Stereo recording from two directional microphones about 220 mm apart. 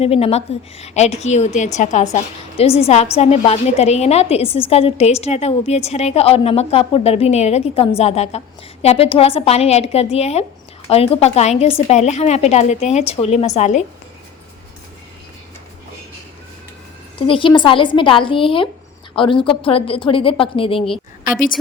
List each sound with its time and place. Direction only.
0.0 s a woman's voice: 25° left (ahead or behind)
17.2 s a woman's voice: 20° left (ahead or behind)